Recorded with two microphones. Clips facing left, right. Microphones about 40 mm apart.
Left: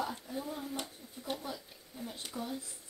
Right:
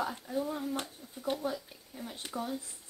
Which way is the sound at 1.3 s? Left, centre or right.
Right.